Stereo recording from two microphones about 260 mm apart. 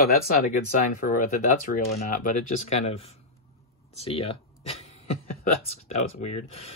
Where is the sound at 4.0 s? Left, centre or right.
Left.